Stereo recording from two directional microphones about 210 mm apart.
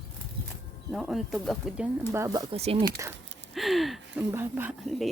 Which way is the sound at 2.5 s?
30° right (ahead or behind).